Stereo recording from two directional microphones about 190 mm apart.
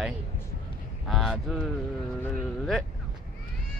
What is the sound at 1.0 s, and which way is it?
Speech, centre (ahead or behind).